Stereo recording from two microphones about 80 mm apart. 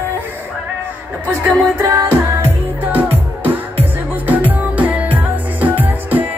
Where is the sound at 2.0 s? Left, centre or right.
Right.